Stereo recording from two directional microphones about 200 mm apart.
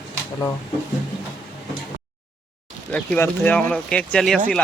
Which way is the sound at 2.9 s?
10° left (ahead or behind).